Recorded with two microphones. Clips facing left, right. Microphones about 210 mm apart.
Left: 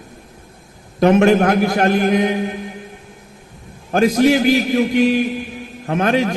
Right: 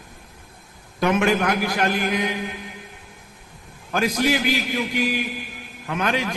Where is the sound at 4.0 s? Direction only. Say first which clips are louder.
Left 8 dB; 25° left (ahead or behind).